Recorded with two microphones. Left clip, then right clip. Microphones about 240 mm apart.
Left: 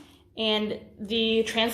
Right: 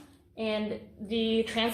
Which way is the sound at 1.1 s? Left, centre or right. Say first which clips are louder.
Left 4 dB; left.